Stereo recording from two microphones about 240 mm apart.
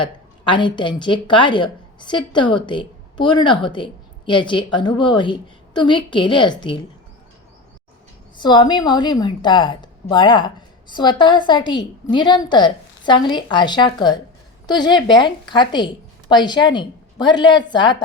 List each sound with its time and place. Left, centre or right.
0.0 s a woman's voice: centre
8.4 s a woman's voice: centre